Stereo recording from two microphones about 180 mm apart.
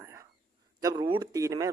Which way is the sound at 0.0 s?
15° right (ahead or behind).